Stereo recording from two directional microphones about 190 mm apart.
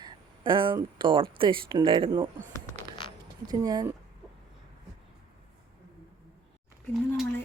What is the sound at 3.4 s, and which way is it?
Speech, 20° right (ahead or behind).